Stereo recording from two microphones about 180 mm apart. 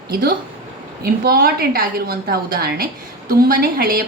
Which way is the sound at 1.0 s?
55° right (ahead or behind).